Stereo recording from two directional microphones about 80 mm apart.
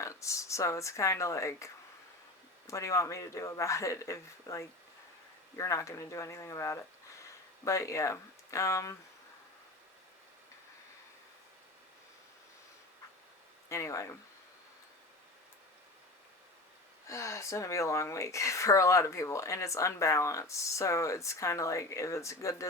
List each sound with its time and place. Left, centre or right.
0.0 s speech: left
13.7 s speech: left
17.1 s speech: left